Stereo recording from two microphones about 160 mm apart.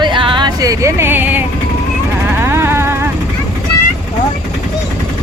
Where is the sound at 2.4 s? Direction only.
15° right (ahead or behind).